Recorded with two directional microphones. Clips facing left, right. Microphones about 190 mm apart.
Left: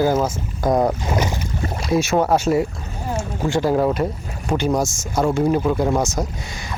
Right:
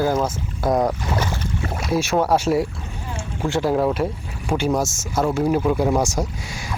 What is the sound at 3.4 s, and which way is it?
Speech, centre (ahead or behind).